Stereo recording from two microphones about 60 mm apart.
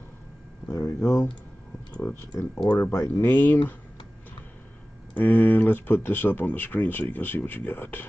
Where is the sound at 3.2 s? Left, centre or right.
Left.